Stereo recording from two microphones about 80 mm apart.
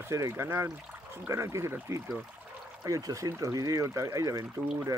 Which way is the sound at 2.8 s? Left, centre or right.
Right.